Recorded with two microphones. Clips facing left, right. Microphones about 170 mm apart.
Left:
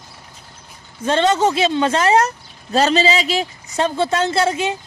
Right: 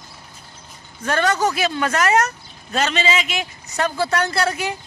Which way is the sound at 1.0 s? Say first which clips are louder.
Left 4 dB; 25° left (ahead or behind).